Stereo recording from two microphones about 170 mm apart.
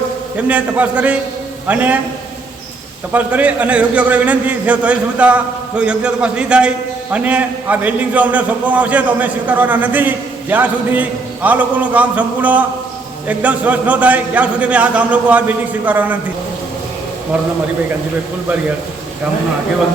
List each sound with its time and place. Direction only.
0.3 s a man's voice: 10° right (ahead or behind)
3.1 s a man's voice: 10° right (ahead or behind)